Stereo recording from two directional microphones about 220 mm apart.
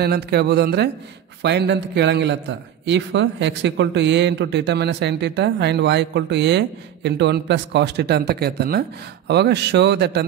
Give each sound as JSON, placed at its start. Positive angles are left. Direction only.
{"t": 0.0, "sound": "a man's voice", "side_deg": -45}